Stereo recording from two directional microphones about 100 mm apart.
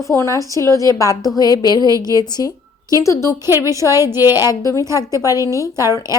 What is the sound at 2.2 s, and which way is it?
Speech, 40° left (ahead or behind).